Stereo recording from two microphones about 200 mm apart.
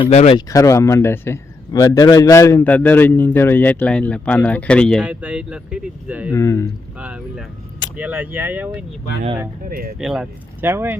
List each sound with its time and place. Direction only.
0.0 s speech: 30° left (ahead or behind)
0.3 s a man's voice: 15° left (ahead or behind); by 6.3 s 5° right (ahead or behind)
6.3 s a man's voice: 15° left (ahead or behind)
7.0 s speech: 5° right (ahead or behind)
9.6 s speech: 45° right (ahead or behind)
10.0 s speech: centre (ahead or behind)